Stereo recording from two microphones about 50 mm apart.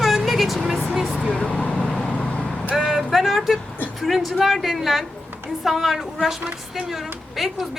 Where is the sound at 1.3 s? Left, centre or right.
Left.